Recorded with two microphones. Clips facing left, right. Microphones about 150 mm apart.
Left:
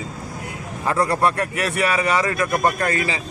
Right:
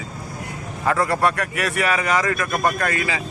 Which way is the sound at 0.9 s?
25° left (ahead or behind).